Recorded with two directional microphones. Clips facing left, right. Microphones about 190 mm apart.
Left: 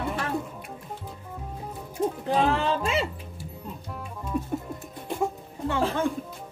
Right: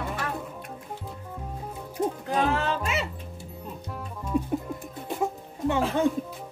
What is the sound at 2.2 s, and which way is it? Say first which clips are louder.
Music: left 3 dB; 30° left (ahead or behind).